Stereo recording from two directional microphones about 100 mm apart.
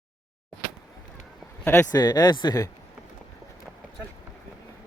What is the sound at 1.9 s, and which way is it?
Speech, 40° left (ahead or behind).